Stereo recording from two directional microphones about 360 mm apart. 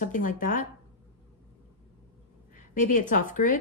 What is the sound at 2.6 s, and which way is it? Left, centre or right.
A woman's voice, left.